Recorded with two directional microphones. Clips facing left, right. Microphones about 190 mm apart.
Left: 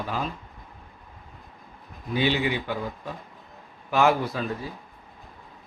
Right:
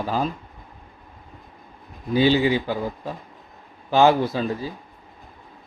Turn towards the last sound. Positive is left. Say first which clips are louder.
# right 5 dB
turn(degrees=-30)  # may be behind; listen again after turning